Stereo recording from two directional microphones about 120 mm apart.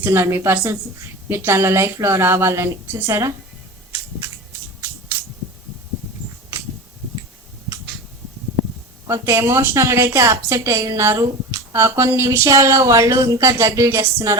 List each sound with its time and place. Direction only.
0.0 s speech: 20° right (ahead or behind)
9.0 s speech: 25° right (ahead or behind)